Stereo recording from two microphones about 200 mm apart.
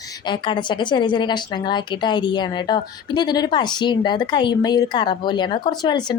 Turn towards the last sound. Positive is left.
turn(degrees=20)  # may be behind; listen again after turning